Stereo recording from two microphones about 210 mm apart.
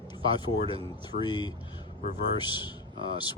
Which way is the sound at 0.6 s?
25° right (ahead or behind).